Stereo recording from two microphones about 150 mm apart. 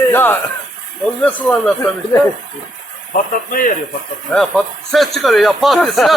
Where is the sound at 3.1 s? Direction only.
65° left (ahead or behind).